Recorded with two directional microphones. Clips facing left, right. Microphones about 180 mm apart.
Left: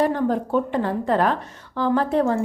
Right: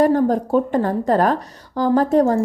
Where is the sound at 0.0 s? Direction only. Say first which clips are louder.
Right 5 dB; 40° right (ahead or behind).